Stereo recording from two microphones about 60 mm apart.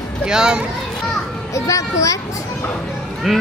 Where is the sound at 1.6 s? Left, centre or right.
Left.